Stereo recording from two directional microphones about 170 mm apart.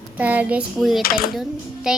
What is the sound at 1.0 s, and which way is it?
Speech, 65° left (ahead or behind).